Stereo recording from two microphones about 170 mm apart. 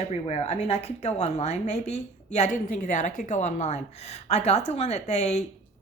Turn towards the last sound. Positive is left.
turn(degrees=40)  # may be behind; listen again after turning